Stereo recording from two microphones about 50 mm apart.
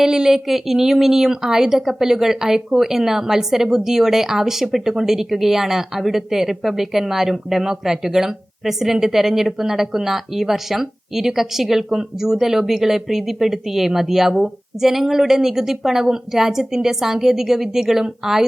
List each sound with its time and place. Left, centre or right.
0.0 s a woman's voice: centre